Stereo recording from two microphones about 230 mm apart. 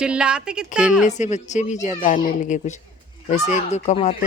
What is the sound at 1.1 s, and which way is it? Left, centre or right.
Speech, left.